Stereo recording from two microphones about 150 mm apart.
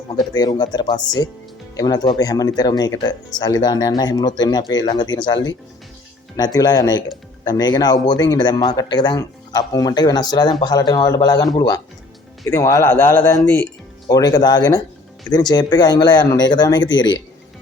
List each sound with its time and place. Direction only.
0.2 s a man's voice: 25° left (ahead or behind)